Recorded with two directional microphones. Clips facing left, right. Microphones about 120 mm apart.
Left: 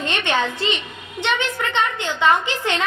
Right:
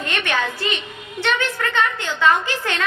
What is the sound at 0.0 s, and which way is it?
A woman's voice, 25° left (ahead or behind).